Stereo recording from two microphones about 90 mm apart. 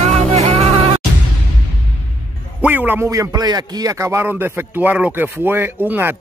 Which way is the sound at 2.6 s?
20° right (ahead or behind).